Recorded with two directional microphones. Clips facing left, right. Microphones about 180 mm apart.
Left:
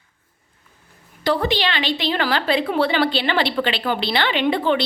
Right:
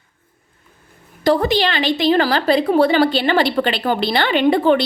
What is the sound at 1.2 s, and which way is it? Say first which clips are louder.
A woman's voice: right 5 dB; 45° right (ahead or behind).